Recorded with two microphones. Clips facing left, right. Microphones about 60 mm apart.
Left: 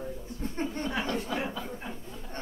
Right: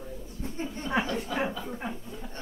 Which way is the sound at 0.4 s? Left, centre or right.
Left.